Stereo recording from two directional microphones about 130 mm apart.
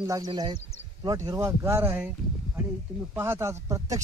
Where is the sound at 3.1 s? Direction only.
20° right (ahead or behind).